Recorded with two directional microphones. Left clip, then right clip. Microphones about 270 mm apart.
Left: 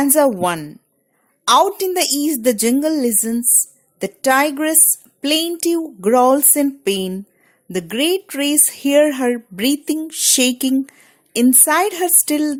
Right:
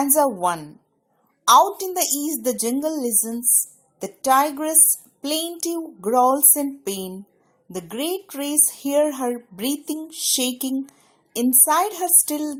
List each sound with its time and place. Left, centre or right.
0.0 s a woman's voice: left